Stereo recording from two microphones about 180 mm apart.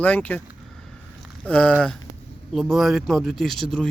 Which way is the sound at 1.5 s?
10° left (ahead or behind).